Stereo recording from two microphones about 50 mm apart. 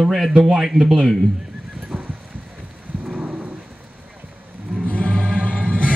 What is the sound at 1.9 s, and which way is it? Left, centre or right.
Horse, right.